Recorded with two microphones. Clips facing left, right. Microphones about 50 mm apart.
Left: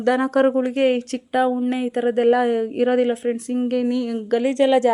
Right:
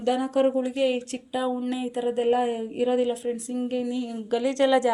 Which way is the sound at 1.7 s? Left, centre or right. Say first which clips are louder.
Left 6 dB; left.